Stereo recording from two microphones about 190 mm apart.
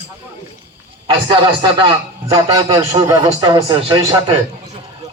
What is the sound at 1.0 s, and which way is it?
Speech, 25° right (ahead or behind).